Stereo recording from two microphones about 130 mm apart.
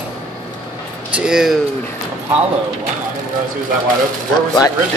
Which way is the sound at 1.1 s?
5° right (ahead or behind).